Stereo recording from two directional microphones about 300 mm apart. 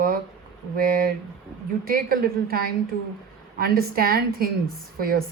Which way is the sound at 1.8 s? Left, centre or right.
Right.